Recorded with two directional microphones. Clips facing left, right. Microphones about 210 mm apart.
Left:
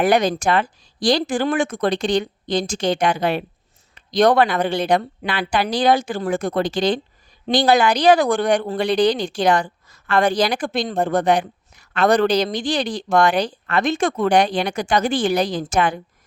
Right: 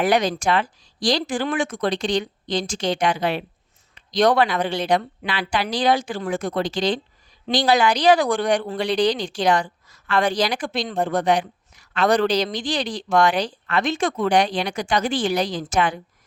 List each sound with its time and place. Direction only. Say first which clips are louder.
0.0 s a woman's voice: left 3 dB; 50° left (ahead or behind)